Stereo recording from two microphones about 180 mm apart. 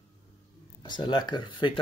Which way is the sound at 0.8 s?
25° left (ahead or behind).